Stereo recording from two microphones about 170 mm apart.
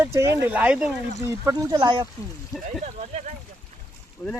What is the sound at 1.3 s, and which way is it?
Speech, 20° right (ahead or behind).